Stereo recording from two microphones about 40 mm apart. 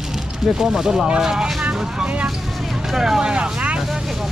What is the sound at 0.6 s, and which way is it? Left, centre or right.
Speech, centre.